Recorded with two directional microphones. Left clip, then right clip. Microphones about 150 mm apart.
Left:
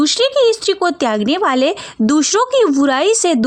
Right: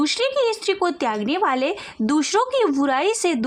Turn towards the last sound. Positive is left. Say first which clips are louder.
# left 7 dB
turn(degrees=35)  # may be behind; listen again after turning